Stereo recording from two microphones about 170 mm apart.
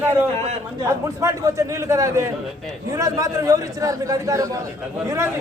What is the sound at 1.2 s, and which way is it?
A man's voice, 15° right (ahead or behind).